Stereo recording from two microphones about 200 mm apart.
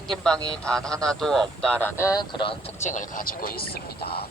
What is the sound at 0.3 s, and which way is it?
Speech, 20° right (ahead or behind).